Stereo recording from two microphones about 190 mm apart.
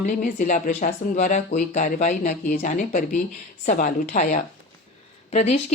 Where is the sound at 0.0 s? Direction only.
40° left (ahead or behind).